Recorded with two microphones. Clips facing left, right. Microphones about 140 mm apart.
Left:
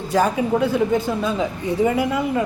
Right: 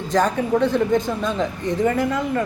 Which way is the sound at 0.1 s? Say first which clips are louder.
Even; 10° left (ahead or behind).